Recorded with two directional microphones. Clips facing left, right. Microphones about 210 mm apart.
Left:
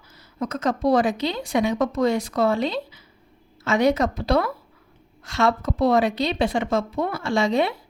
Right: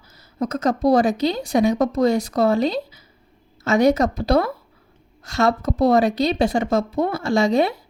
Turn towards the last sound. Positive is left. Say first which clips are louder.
# right 3 dB
turn(degrees=-40)  # may be behind; listen again after turning